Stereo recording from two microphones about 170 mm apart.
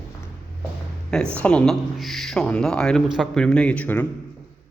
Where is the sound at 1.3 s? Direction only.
5° left (ahead or behind).